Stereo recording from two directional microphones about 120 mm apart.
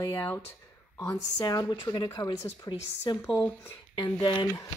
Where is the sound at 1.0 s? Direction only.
30° left (ahead or behind).